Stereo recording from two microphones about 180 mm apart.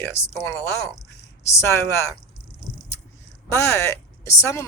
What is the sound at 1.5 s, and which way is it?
Speech, 15° left (ahead or behind).